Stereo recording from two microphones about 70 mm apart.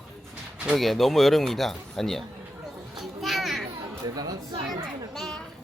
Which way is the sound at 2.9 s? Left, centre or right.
Centre.